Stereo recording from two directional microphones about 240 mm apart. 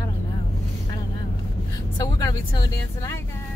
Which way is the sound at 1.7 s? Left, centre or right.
Centre.